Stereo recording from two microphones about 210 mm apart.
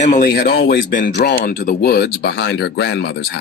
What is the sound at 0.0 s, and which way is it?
Speech, 40° left (ahead or behind).